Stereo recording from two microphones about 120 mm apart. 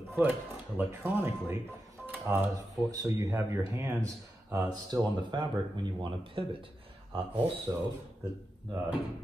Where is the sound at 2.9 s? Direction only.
30° right (ahead or behind).